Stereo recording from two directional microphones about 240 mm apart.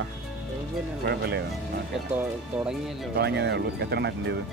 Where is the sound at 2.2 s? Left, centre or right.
Centre.